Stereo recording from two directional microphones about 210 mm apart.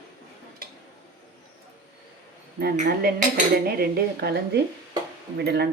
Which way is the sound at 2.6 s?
45° right (ahead or behind).